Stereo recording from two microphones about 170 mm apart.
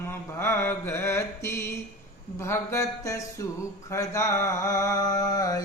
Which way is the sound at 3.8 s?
20° left (ahead or behind).